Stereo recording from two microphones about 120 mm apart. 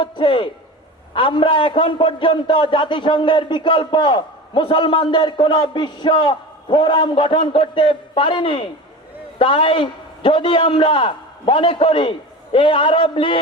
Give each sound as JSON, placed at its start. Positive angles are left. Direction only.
{"t": 0.0, "sound": "a man's voice", "side_deg": 45}